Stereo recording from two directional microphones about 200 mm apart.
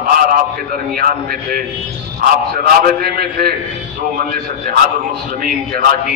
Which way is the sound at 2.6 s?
50° right (ahead or behind).